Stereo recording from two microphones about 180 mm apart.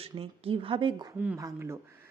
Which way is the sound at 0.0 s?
30° right (ahead or behind).